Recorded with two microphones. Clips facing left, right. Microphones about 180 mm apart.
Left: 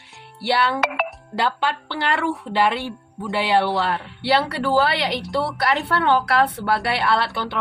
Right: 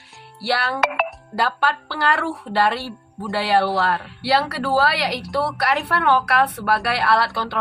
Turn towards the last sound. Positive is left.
turn(degrees=20)  # may be behind; listen again after turning